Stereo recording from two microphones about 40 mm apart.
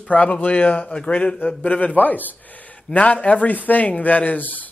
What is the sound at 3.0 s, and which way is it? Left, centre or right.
Speech, left.